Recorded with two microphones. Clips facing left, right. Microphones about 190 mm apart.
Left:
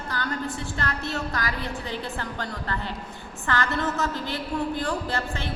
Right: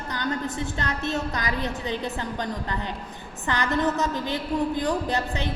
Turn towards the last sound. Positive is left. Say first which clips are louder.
# right 3 dB
turn(degrees=-20)  # may be behind; listen again after turning